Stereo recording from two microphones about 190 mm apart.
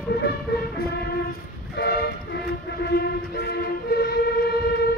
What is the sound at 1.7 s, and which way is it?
Vehicle, 60° left (ahead or behind).